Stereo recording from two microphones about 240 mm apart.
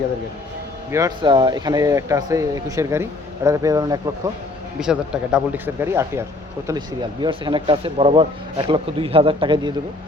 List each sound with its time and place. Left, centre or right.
0.9 s speech: centre
4.8 s speech: centre; by 9.7 s right